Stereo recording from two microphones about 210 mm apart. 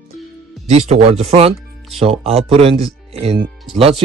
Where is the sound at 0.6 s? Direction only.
30° right (ahead or behind).